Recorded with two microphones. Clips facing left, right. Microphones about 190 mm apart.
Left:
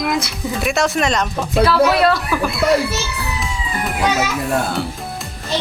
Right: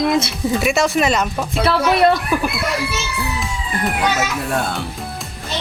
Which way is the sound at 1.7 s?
20° right (ahead or behind).